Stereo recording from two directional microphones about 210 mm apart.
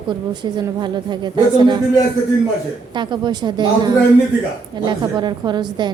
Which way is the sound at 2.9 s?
20° right (ahead or behind).